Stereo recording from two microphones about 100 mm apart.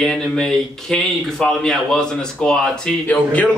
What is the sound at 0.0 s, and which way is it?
A man's voice, 5° left (ahead or behind).